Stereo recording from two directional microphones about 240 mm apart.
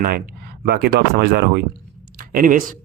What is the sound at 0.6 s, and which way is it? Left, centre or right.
Speech, right.